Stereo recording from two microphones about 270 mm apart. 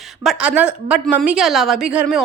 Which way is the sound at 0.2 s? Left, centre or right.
Centre.